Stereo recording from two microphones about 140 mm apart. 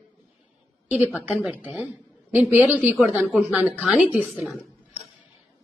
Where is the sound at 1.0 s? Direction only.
10° right (ahead or behind).